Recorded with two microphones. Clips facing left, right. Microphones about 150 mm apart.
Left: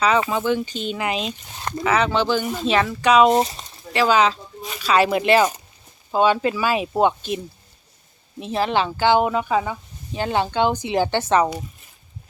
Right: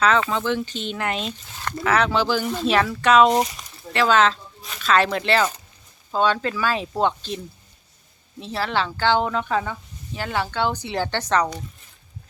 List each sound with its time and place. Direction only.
0.2 s speech: 10° left (ahead or behind)
1.5 s a sound: 20° left (ahead or behind)
1.8 s speech: centre (ahead or behind)
2.4 s speech: 10° left (ahead or behind)
2.6 s speech: centre (ahead or behind)
3.3 s speech: 30° left (ahead or behind)
3.9 s speech: 5° left (ahead or behind)
10.2 s speech: 20° left (ahead or behind)